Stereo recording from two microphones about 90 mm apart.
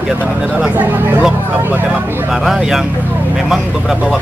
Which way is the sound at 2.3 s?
5° right (ahead or behind).